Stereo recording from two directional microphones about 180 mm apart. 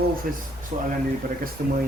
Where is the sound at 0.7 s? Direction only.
40° right (ahead or behind).